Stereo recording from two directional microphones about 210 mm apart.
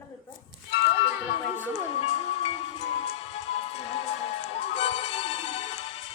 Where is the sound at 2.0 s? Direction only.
30° left (ahead or behind).